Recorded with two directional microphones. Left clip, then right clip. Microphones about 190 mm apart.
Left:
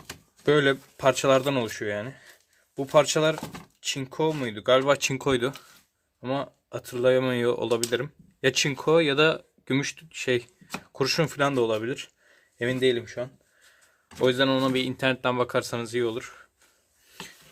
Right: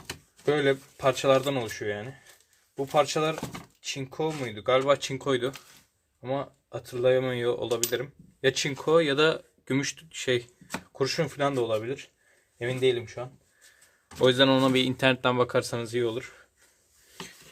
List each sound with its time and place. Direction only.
0.4 s speech: 40° left (ahead or behind)
14.2 s speech: 5° left (ahead or behind)